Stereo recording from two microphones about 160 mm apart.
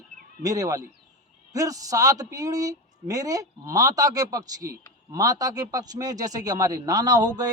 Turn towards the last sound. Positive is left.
turn(degrees=-25)  # may be behind; listen again after turning